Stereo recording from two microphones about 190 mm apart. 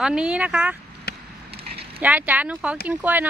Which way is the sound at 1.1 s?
60° left (ahead or behind).